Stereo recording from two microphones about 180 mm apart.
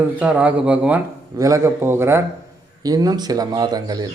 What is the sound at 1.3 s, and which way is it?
A man's voice, 20° right (ahead or behind).